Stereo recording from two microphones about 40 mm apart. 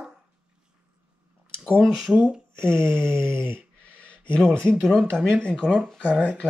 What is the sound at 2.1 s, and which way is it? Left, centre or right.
Speech, centre.